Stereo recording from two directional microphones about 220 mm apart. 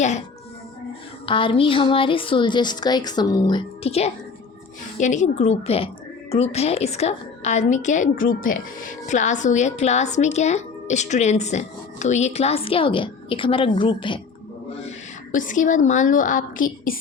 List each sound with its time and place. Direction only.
1.3 s a woman's voice: 25° left (ahead or behind)
14.8 s a woman's voice: 35° left (ahead or behind)